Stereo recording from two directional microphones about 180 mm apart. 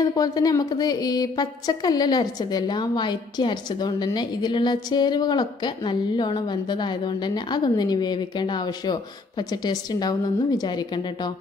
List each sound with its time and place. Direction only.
0.0 s speech: 20° left (ahead or behind)